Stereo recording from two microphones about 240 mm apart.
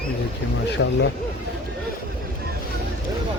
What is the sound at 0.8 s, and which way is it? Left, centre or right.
Speech, left.